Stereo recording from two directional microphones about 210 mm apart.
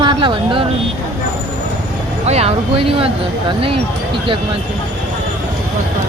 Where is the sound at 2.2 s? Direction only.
30° right (ahead or behind).